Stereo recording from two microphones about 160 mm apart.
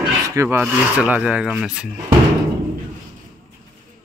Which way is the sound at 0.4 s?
15° right (ahead or behind).